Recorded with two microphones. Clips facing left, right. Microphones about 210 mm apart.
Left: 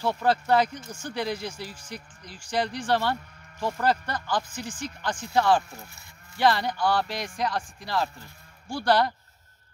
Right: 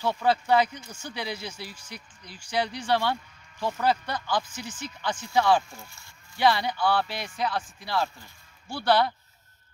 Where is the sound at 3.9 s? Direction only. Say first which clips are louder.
Even; 10° right (ahead or behind).